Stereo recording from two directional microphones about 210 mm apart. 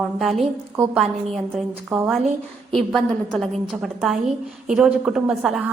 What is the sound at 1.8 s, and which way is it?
Speech, 10° right (ahead or behind).